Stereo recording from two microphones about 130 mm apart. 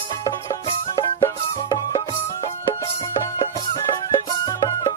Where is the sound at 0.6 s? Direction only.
40° left (ahead or behind).